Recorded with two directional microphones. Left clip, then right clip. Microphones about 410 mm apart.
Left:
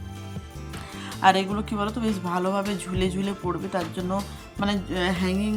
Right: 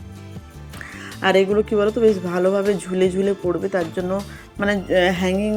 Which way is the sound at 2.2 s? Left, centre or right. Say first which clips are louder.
Right 6 dB; left.